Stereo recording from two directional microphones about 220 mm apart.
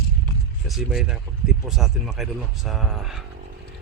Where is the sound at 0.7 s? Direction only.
Centre (ahead or behind).